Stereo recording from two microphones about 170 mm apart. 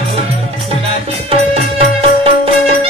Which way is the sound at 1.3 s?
35° right (ahead or behind).